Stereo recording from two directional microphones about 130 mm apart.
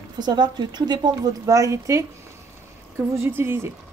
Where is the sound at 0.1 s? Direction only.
35° right (ahead or behind).